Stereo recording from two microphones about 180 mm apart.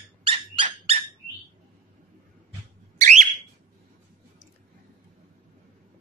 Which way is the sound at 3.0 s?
40° right (ahead or behind).